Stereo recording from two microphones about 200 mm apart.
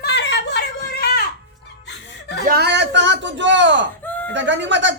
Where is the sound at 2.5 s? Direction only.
55° right (ahead or behind).